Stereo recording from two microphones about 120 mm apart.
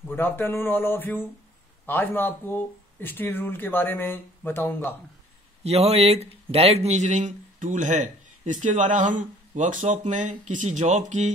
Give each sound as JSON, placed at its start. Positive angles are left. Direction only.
{"t": 0.0, "sound": "speech", "side_deg": 20}
{"t": 5.6, "sound": "a man's voice", "side_deg": -60}